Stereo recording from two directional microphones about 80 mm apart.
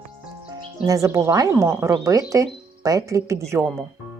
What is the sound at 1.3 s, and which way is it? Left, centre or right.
Speech, right.